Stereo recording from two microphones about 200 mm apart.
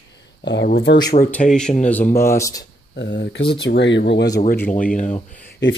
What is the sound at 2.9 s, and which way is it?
Speech, 60° left (ahead or behind).